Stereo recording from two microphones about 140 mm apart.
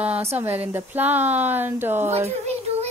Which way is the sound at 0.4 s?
15° right (ahead or behind).